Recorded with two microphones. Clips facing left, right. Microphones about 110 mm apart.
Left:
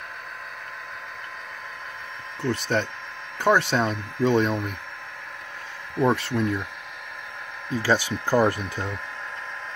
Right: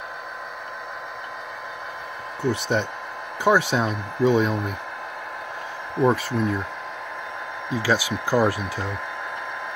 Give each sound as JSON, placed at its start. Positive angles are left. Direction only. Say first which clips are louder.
{"t": 2.4, "sound": "speech", "louder": "right 2 dB", "side_deg": -15}
{"t": 6.0, "sound": "speech", "louder": "right 2 dB", "side_deg": 0}
{"t": 7.7, "sound": "speech", "louder": "even", "side_deg": -10}